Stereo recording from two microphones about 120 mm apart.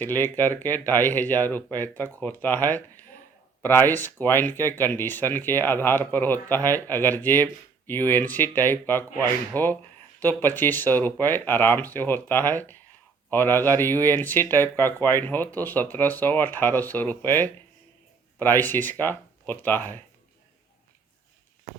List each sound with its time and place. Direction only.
0.0 s speech: 15° left (ahead or behind)